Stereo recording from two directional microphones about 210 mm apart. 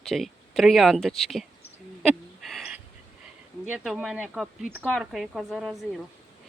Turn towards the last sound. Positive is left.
turn(degrees=0)  # may be behind; listen again after turning